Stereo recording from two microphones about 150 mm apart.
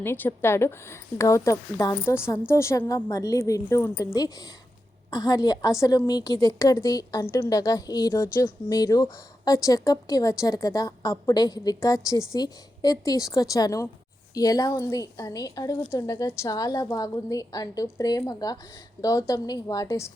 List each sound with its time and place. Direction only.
0.0 s a woman's voice: 15° left (ahead or behind)